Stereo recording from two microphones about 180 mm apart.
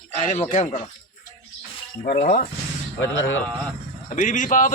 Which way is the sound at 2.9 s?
90° left.